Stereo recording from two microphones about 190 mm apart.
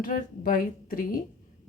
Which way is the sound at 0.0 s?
50° left (ahead or behind).